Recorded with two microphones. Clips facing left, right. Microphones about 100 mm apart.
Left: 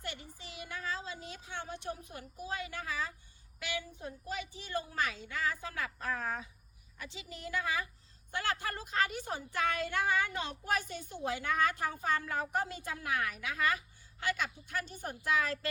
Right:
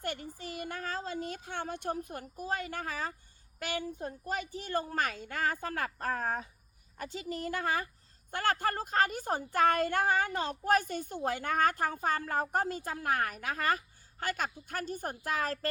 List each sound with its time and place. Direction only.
0.0 s speech: 50° right (ahead or behind)